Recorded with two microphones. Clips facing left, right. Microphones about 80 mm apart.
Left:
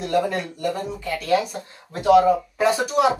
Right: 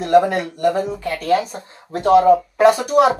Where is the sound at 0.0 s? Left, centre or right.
Right.